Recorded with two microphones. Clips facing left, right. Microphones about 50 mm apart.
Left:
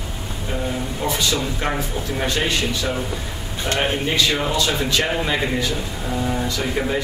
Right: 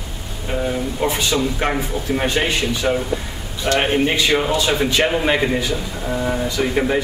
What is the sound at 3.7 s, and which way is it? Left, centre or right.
Speech, right.